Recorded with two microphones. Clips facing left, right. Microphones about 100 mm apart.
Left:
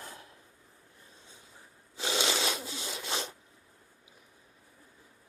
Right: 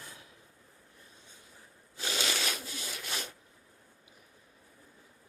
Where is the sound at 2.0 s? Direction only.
20° left (ahead or behind).